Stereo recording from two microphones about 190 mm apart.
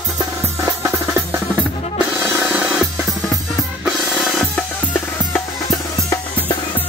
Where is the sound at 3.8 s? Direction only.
Centre (ahead or behind).